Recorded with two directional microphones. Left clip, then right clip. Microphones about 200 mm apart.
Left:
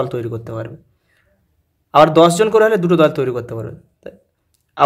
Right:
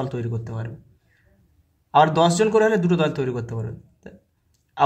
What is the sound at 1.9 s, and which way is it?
Speech, 30° left (ahead or behind).